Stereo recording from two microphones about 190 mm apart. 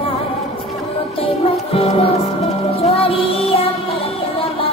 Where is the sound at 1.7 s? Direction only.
30° left (ahead or behind).